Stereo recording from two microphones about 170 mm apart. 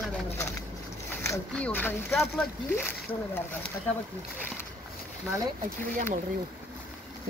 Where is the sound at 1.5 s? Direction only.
10° left (ahead or behind).